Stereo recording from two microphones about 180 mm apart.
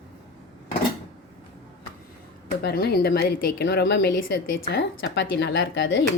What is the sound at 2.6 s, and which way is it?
A woman's voice, 60° left (ahead or behind).